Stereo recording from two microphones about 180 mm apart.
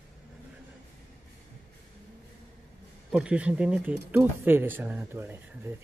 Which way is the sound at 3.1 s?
5° right (ahead or behind).